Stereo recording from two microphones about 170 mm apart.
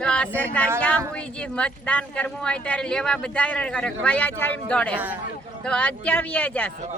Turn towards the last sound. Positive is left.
turn(degrees=10)  # may be behind; listen again after turning